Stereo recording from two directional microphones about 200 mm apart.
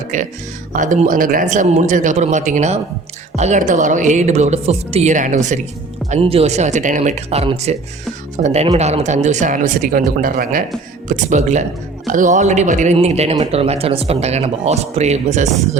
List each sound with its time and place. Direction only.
0.1 s speech: 40° right (ahead or behind)